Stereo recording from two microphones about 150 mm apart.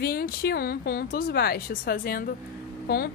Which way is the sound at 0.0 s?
90° left.